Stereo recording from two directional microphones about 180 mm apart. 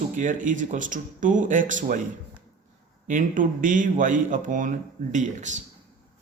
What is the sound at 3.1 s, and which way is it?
Speech, 45° right (ahead or behind).